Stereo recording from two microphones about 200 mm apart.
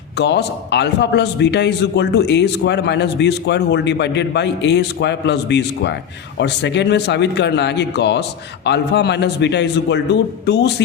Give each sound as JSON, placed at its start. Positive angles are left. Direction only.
{"t": 0.2, "sound": "a man's voice", "side_deg": 60}